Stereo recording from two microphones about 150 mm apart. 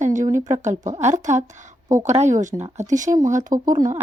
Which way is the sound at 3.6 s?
25° right (ahead or behind).